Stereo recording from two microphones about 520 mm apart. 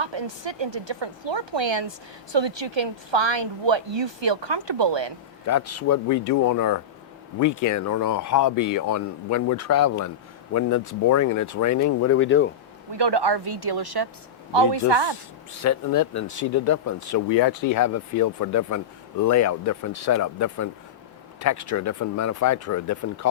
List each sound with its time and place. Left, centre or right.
0.0 s a woman's voice: right
5.5 s speech: left
12.9 s speech: right
15.6 s speech: left